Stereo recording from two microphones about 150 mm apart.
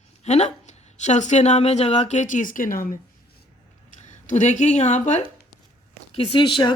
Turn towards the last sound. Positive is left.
turn(degrees=30)  # may be behind; listen again after turning